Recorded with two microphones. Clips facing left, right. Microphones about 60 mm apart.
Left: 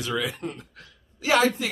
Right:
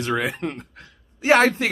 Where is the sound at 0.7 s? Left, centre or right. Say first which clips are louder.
Right 4 dB; right.